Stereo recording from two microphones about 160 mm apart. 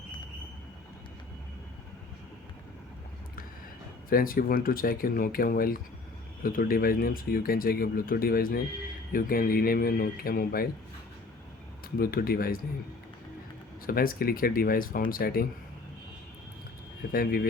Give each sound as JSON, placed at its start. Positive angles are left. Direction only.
{"t": 4.1, "sound": "speech", "side_deg": 65}
{"t": 11.9, "sound": "speech", "side_deg": 65}
{"t": 13.8, "sound": "speech", "side_deg": 65}
{"t": 17.1, "sound": "speech", "side_deg": 65}